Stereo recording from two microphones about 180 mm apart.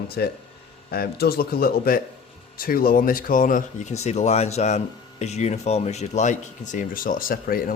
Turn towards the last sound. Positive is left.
turn(degrees=55)  # may be behind; listen again after turning